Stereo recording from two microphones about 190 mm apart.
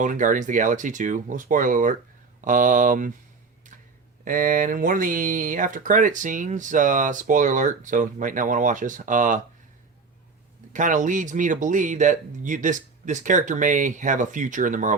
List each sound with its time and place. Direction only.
0.0 s speech: 45° right (ahead or behind)
4.2 s speech: 45° right (ahead or behind)
10.7 s speech: 40° right (ahead or behind)